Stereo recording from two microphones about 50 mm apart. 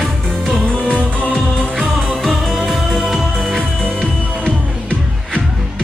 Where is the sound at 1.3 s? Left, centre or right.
Centre.